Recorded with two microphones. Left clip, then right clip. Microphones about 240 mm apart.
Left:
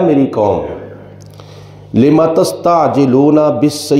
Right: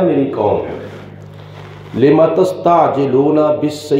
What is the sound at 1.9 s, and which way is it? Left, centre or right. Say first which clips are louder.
A man's voice: left 1 dB; left.